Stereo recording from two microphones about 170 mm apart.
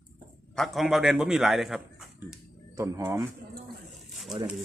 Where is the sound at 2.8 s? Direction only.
20° right (ahead or behind).